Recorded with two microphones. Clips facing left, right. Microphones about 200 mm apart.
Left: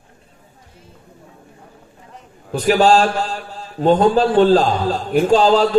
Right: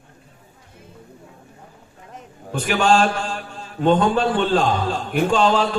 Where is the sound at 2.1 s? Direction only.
35° left (ahead or behind).